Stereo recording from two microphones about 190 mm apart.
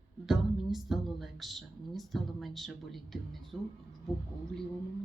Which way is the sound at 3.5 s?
Centre (ahead or behind).